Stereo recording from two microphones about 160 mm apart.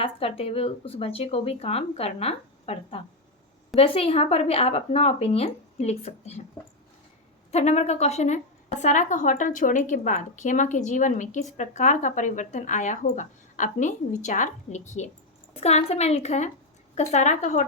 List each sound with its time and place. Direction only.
0.0 s speech: 35° left (ahead or behind)
7.5 s a woman's voice: 45° left (ahead or behind)